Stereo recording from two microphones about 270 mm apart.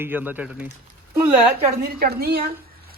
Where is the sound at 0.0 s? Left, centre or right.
Centre.